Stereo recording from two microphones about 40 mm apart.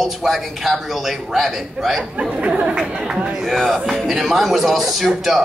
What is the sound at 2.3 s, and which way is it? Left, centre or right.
Speech, right.